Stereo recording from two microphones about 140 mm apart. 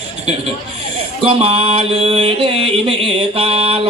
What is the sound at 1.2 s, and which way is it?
Music, 45° right (ahead or behind).